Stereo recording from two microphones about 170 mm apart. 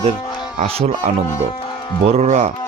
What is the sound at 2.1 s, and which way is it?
Speech, 40° right (ahead or behind).